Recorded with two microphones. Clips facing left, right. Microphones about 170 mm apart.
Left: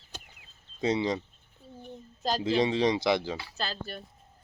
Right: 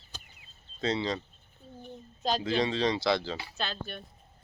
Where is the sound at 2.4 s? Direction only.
20° left (ahead or behind).